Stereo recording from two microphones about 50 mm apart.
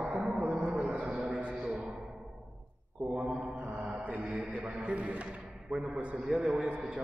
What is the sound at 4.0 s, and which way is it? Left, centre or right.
A man's voice, right.